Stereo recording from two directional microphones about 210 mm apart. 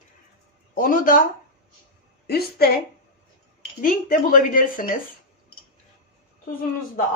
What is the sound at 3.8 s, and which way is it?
Speech, 40° left (ahead or behind).